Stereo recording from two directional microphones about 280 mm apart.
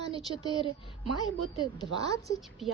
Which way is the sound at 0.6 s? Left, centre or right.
Centre.